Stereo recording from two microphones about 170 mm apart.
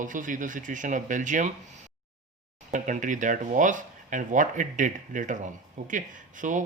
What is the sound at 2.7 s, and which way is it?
Speech, 50° right (ahead or behind).